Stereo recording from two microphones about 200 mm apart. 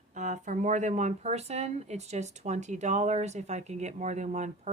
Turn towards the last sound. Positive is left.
turn(degrees=-35)  # may be behind; listen again after turning